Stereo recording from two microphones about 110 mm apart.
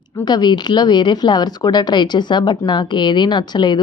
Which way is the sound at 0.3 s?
40° left (ahead or behind).